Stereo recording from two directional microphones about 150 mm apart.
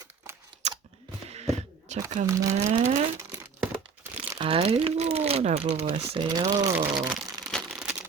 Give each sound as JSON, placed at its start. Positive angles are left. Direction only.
{"t": 0.6, "sound": "chewing", "side_deg": -50}
{"t": 1.3, "sound": "a sound", "side_deg": -45}
{"t": 2.3, "sound": "speech", "side_deg": -20}
{"t": 4.4, "sound": "speech", "side_deg": -35}
{"t": 6.2, "sound": "speech", "side_deg": -25}
{"t": 7.1, "sound": "crumpling", "side_deg": 0}